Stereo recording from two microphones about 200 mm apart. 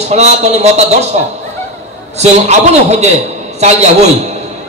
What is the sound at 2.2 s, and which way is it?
Speech, 35° right (ahead or behind).